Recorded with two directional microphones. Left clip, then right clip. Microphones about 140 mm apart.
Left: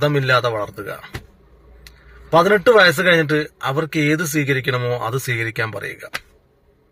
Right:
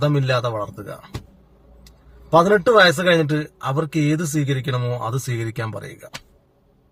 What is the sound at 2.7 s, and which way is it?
Speech, 10° right (ahead or behind).